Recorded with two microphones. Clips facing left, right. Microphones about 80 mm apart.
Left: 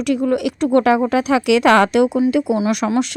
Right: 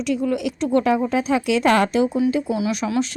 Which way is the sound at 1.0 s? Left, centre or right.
Left.